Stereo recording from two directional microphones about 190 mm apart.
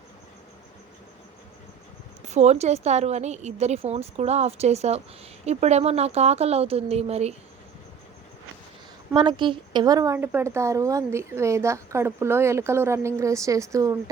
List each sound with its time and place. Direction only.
2.2 s a woman's voice: 35° right (ahead or behind)
9.1 s a woman's voice: 25° right (ahead or behind)